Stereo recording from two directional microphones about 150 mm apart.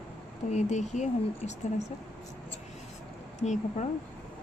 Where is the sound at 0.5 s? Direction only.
50° left (ahead or behind).